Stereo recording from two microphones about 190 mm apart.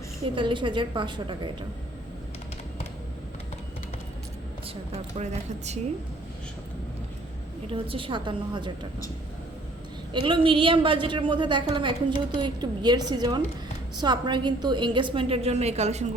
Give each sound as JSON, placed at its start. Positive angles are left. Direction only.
{"t": 0.3, "sound": "a woman's voice", "side_deg": -25}
{"t": 4.9, "sound": "a woman's voice", "side_deg": -35}
{"t": 7.7, "sound": "a woman's voice", "side_deg": -25}
{"t": 10.1, "sound": "a woman's voice", "side_deg": -25}